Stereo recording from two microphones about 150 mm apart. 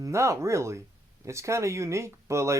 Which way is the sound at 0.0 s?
20° right (ahead or behind).